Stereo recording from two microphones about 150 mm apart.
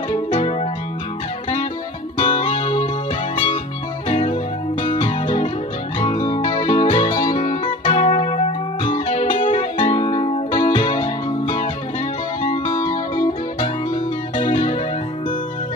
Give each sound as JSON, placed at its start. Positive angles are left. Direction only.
{"t": 0.3, "sound": "music", "side_deg": 40}
{"t": 2.1, "sound": "music", "side_deg": 35}
{"t": 4.1, "sound": "music", "side_deg": 40}